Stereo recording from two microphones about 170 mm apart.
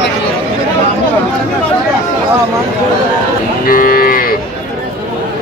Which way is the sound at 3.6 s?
55° left (ahead or behind).